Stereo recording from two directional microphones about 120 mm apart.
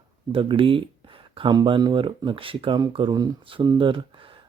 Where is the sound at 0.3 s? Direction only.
50° right (ahead or behind).